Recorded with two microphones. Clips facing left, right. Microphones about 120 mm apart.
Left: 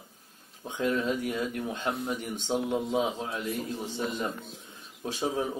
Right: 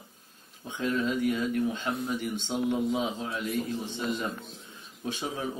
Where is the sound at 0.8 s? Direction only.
40° left (ahead or behind).